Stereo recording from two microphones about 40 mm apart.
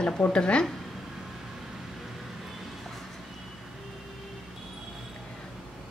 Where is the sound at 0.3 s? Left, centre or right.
Left.